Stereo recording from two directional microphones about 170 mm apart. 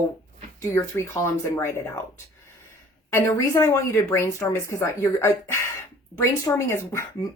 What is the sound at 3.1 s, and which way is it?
Speech, 15° left (ahead or behind).